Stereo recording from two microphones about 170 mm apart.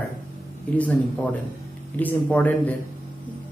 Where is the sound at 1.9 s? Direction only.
10° left (ahead or behind).